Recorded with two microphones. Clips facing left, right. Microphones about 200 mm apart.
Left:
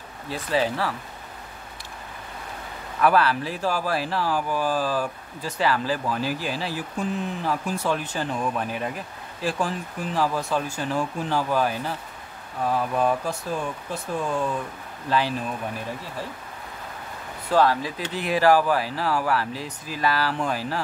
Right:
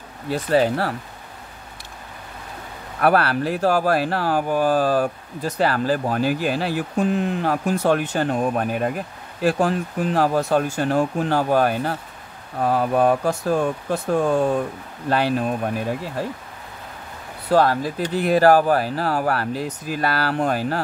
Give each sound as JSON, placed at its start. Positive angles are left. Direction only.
{"t": 0.3, "sound": "speech", "side_deg": -55}
{"t": 3.0, "sound": "speech", "side_deg": -55}
{"t": 17.5, "sound": "speech", "side_deg": -45}